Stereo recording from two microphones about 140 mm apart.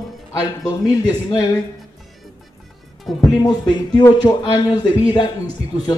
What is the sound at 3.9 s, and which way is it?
A man's voice, 30° left (ahead or behind).